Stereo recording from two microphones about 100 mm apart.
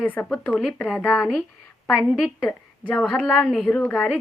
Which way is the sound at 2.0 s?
Centre (ahead or behind).